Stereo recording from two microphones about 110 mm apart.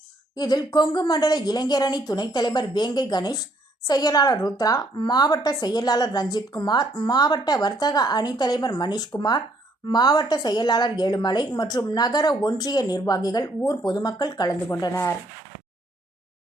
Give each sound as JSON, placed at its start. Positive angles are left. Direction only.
{"t": 0.3, "sound": "a woman's voice", "side_deg": 35}